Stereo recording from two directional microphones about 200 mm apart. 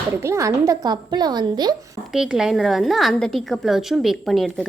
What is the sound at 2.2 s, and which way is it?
A woman's voice, centre (ahead or behind).